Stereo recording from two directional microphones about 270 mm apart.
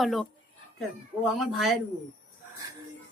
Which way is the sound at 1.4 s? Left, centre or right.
Centre.